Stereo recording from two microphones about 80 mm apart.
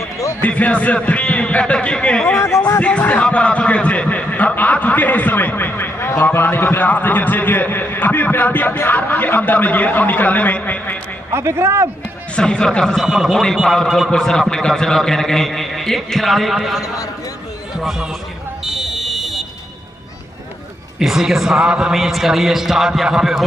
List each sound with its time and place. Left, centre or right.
0.4 s a man's voice: centre
2.3 s a man's voice: left
2.8 s a man's voice: centre
11.3 s speech: right
12.4 s a man's voice: centre
18.7 s fire alarm: centre
21.0 s a man's voice: centre